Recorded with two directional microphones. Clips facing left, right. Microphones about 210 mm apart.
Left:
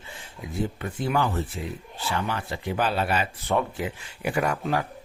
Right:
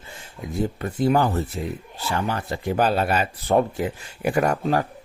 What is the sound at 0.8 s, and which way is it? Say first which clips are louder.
Speech: right 7 dB; 40° right (ahead or behind).